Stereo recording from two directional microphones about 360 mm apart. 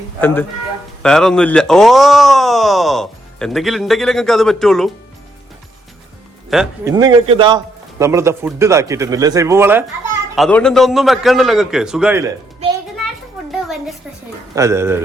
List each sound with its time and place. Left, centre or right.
0.2 s speech: centre
6.5 s a man's voice: centre
14.5 s a man's voice: centre